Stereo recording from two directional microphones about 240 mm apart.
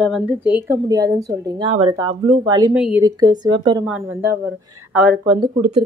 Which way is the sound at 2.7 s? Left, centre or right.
Centre.